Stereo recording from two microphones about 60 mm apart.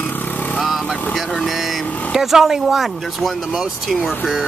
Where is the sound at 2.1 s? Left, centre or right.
Centre.